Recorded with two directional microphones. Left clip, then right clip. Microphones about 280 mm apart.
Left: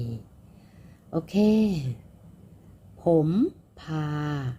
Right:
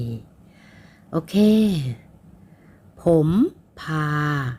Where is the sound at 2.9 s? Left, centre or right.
Right.